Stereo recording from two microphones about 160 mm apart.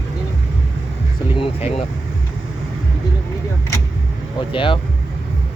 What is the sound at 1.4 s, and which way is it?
Speech, 35° left (ahead or behind).